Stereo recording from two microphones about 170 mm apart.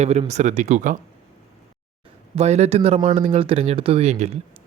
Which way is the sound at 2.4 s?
40° right (ahead or behind).